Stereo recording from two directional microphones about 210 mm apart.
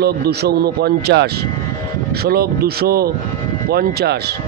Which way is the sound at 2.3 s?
45° right (ahead or behind).